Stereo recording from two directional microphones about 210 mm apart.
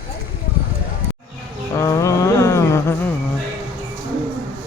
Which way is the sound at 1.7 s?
15° left (ahead or behind).